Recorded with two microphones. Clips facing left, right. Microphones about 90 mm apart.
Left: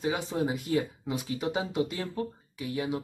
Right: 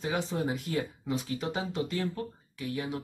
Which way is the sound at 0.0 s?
5° left (ahead or behind).